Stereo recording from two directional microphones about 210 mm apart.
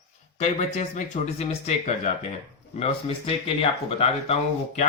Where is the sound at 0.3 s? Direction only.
35° left (ahead or behind).